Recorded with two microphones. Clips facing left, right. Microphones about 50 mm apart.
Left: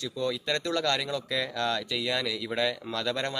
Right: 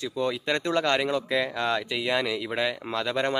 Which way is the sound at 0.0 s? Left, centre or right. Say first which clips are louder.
Right 3 dB; right.